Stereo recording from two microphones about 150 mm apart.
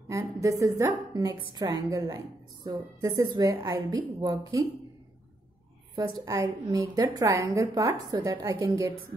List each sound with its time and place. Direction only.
0.1 s a woman's voice: 20° right (ahead or behind)
5.9 s a woman's voice: 25° right (ahead or behind)